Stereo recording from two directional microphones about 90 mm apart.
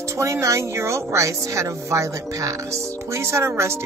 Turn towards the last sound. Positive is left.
turn(degrees=-30)  # may be behind; listen again after turning